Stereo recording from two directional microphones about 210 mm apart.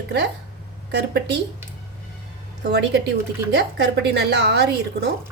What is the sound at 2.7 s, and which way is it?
A woman's voice, 55° right (ahead or behind).